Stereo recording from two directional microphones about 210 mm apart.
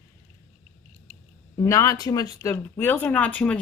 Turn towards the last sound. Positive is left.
turn(degrees=5)  # may be behind; listen again after turning